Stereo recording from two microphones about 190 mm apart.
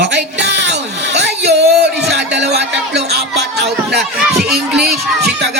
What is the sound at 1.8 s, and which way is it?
Speech, 60° right (ahead or behind).